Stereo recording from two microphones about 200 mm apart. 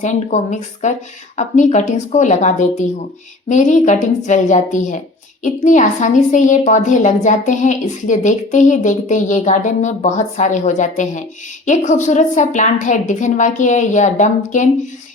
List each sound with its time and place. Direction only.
0.0 s a woman's voice: 40° left (ahead or behind)